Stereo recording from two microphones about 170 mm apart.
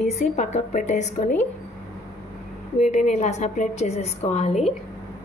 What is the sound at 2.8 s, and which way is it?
Speech, 45° left (ahead or behind).